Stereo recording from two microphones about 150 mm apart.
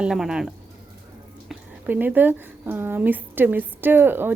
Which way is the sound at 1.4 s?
10° right (ahead or behind).